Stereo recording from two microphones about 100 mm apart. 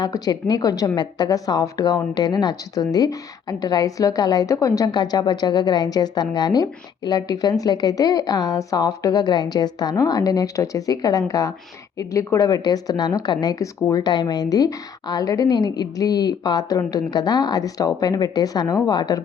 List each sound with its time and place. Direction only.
0.0 s a woman's voice: 40° left (ahead or behind)